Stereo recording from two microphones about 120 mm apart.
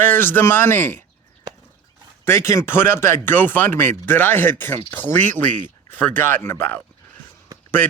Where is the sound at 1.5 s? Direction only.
35° right (ahead or behind).